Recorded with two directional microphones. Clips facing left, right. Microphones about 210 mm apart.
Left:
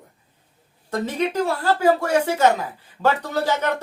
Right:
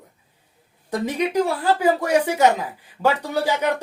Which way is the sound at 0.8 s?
15° right (ahead or behind).